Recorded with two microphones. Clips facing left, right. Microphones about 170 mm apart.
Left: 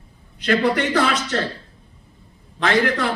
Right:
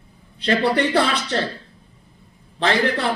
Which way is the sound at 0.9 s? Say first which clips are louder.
Even; 30° right (ahead or behind).